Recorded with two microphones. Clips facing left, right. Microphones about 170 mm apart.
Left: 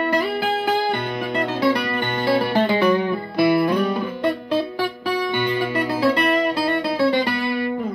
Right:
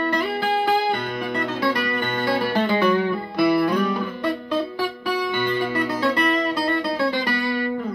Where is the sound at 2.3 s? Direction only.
10° left (ahead or behind).